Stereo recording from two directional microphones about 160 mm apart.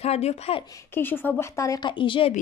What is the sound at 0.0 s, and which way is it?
Speech, 40° left (ahead or behind).